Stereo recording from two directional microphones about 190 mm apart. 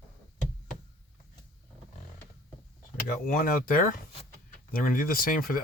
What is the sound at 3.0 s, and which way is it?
Speech, 45° left (ahead or behind).